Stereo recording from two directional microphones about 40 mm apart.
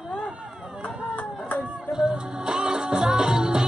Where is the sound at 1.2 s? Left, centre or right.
Left.